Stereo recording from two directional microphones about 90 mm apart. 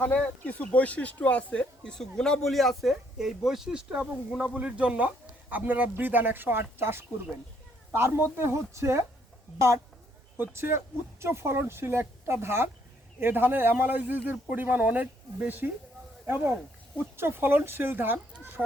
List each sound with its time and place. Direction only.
0.0 s a woman's voice: 15° left (ahead or behind); by 18.6 s 25° right (ahead or behind)